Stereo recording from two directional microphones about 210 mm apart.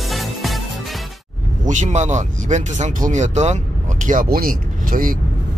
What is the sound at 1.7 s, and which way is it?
Speech, 35° right (ahead or behind).